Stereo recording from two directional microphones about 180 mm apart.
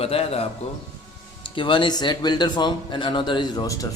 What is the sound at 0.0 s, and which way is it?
Speech, 35° left (ahead or behind).